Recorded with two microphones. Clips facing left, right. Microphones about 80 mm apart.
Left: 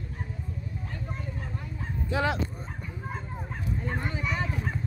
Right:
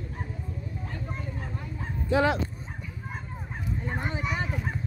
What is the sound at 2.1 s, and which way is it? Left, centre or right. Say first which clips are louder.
Speech: right 4 dB; right.